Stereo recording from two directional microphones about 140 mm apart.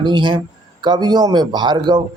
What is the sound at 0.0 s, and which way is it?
A man's voice, 35° right (ahead or behind).